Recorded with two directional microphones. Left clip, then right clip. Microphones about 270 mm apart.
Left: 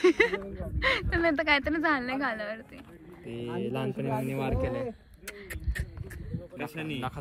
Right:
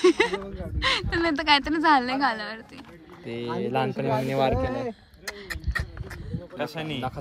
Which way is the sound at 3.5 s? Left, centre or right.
Right.